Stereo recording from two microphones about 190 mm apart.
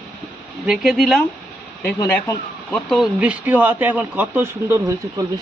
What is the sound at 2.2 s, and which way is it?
Speech, 15° left (ahead or behind).